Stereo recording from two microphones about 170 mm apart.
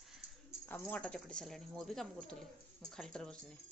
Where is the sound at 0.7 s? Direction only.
10° left (ahead or behind).